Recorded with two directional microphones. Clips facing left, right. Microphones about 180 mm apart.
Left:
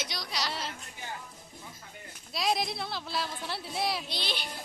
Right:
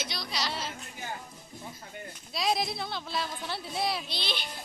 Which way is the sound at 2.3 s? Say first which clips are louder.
Right 1 dB; centre (ahead or behind).